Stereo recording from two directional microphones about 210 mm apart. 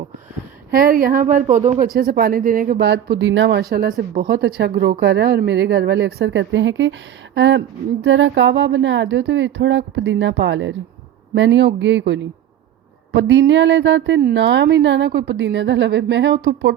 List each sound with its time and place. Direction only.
0.7 s a woman's voice: 45° right (ahead or behind)